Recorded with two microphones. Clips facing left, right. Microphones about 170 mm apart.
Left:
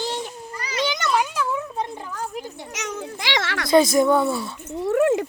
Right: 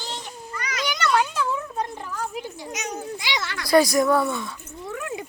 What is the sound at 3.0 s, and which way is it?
Speech, 90° left.